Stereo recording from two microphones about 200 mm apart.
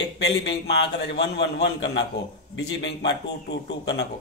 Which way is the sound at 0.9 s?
55° left (ahead or behind).